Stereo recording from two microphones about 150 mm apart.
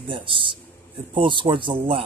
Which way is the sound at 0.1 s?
35° right (ahead or behind).